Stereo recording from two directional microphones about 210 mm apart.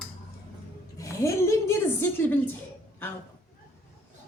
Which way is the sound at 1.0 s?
15° left (ahead or behind).